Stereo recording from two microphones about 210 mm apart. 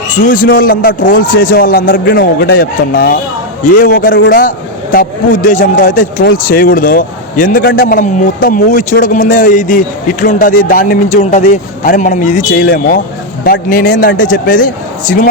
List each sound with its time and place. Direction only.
0.1 s a man's voice: 40° left (ahead or behind)
3.9 s a man's voice: 55° left (ahead or behind); by 12.6 s 35° left (ahead or behind)
12.6 s a man's voice: 45° left (ahead or behind)